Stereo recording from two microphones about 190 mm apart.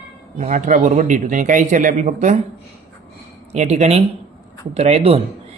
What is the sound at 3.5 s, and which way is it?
Speech, 35° right (ahead or behind).